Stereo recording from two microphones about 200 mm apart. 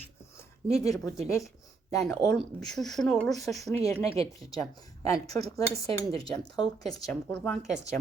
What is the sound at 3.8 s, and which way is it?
Speech, 15° left (ahead or behind).